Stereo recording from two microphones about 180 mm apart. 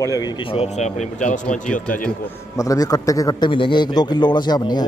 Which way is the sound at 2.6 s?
20° left (ahead or behind).